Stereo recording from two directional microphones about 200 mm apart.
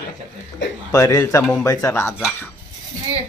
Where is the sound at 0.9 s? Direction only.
15° left (ahead or behind).